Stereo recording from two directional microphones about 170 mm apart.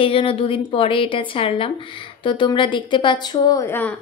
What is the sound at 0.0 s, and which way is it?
A woman's voice, 30° left (ahead or behind).